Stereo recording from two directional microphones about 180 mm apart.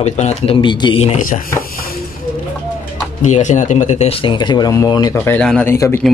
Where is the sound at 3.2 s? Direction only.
40° left (ahead or behind); by 6.0 s 15° left (ahead or behind).